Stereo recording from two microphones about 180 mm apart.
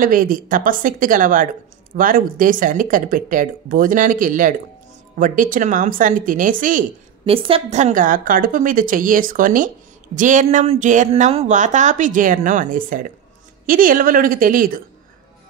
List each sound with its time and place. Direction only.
0.0 s speech: 50° right (ahead or behind)
7.2 s speech: 30° right (ahead or behind); by 14.8 s 50° right (ahead or behind)